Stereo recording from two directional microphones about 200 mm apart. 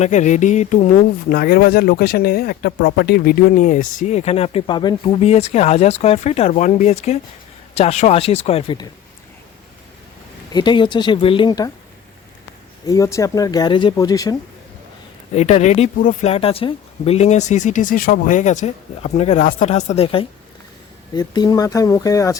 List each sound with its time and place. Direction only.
0.0 s speech: 35° left (ahead or behind)
1.3 s speech: 45° left (ahead or behind); by 8.9 s 25° left (ahead or behind)
10.5 s speech: 20° left (ahead or behind)
12.9 s speech: 15° left (ahead or behind)
15.4 s speech: 35° left (ahead or behind); by 22.4 s 15° left (ahead or behind)